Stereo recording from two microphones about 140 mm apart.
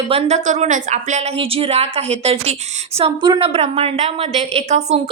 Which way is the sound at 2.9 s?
40° right (ahead or behind).